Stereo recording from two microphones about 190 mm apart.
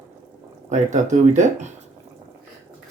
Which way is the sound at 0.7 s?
40° right (ahead or behind).